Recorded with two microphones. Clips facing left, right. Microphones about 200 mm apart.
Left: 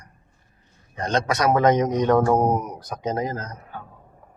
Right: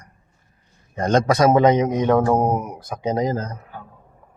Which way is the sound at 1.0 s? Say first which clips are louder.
Right 6 dB; 45° right (ahead or behind).